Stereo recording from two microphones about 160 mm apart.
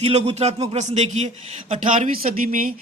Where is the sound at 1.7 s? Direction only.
55° right (ahead or behind).